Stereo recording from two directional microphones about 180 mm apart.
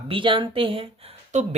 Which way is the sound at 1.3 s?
40° right (ahead or behind).